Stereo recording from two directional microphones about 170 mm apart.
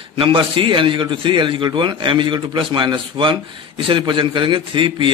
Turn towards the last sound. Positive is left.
turn(degrees=-30)  # may be behind; listen again after turning